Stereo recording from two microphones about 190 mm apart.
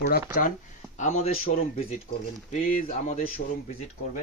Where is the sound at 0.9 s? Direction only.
40° left (ahead or behind).